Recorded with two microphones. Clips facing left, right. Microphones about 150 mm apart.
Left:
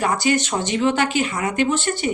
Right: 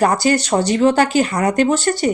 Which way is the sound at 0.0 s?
40° right (ahead or behind).